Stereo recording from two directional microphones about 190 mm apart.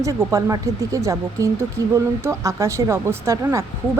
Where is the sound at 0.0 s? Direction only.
15° right (ahead or behind).